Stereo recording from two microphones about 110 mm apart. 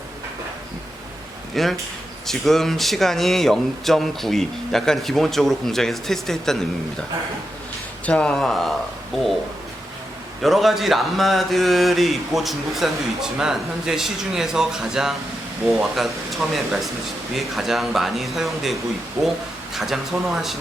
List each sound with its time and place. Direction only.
1.6 s speech: centre (ahead or behind)
8.0 s speech: 10° left (ahead or behind)
10.4 s speech: centre (ahead or behind)
19.2 s speech: 15° right (ahead or behind)
19.7 s speech: centre (ahead or behind)